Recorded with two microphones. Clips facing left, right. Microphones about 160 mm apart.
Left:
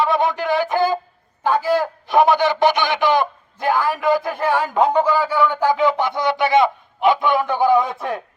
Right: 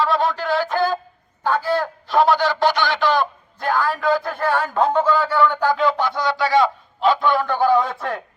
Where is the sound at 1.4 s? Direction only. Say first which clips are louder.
Left 2 dB; 15° left (ahead or behind).